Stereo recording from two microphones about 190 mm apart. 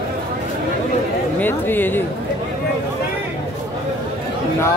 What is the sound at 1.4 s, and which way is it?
Speech, 10° left (ahead or behind).